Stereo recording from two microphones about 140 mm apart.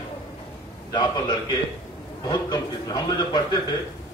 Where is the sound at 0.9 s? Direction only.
30° left (ahead or behind).